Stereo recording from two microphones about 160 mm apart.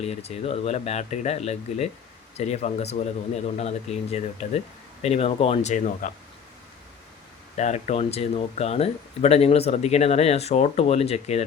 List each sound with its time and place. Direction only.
0.0 s speech: 40° left (ahead or behind)
7.5 s speech: 45° left (ahead or behind)